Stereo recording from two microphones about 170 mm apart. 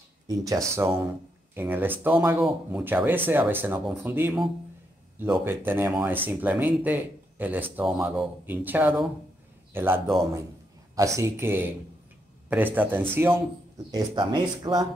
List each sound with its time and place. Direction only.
0.4 s speech: 20° right (ahead or behind)
5.4 s speech: 10° right (ahead or behind)
13.9 s speech: 25° right (ahead or behind)